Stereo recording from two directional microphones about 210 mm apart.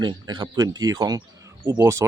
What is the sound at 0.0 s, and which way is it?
Speech, 20° right (ahead or behind).